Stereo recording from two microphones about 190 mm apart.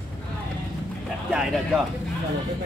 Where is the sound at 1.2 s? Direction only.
5° right (ahead or behind).